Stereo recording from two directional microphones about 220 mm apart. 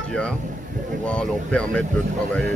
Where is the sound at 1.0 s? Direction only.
5° left (ahead or behind).